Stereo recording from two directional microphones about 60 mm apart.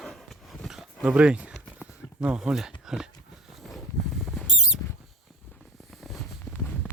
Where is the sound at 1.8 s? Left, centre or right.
Centre.